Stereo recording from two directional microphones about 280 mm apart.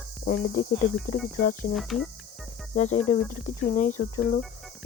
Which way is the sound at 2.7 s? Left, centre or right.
Left.